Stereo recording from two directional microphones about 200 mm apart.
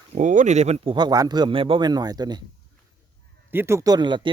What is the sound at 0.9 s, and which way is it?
Speech, 20° right (ahead or behind).